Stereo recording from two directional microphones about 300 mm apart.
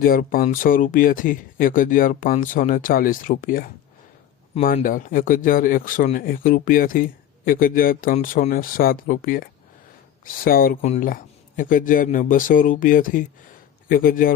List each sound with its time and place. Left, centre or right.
0.0 s speech: left